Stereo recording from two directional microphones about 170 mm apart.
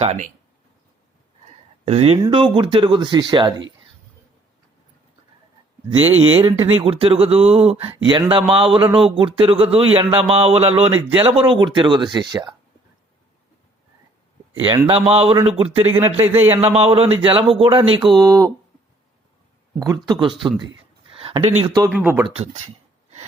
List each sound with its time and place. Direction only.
0.0 s speech: 40° right (ahead or behind)
1.8 s speech: 35° right (ahead or behind)
6.0 s speech: 35° right (ahead or behind)
14.6 s speech: 25° right (ahead or behind)
15.8 s speech: 15° right (ahead or behind)
16.6 s speech: 35° right (ahead or behind); by 18.5 s 20° right (ahead or behind)
19.8 s speech: 20° right (ahead or behind)
21.8 s speech: 10° right (ahead or behind)